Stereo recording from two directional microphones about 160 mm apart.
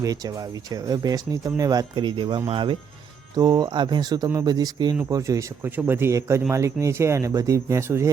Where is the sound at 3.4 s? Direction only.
25° right (ahead or behind).